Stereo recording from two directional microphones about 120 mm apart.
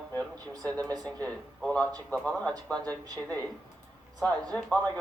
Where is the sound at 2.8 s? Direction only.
30° right (ahead or behind).